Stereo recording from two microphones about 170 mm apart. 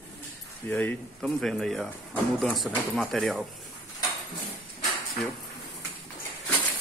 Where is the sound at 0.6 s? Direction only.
15° left (ahead or behind).